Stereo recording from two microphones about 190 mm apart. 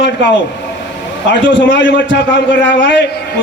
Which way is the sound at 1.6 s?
70° left (ahead or behind).